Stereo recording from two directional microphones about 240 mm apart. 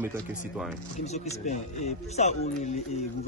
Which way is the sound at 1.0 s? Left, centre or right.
Left.